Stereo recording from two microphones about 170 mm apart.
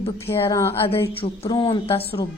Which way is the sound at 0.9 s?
35° left (ahead or behind).